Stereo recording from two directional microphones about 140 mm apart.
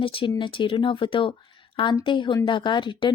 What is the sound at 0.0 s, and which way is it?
Speech, 40° left (ahead or behind).